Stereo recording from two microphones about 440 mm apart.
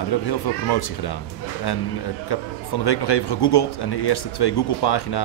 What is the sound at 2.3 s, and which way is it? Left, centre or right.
Speech, left.